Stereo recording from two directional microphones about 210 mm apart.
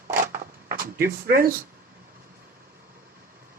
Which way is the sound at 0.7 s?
45° right (ahead or behind).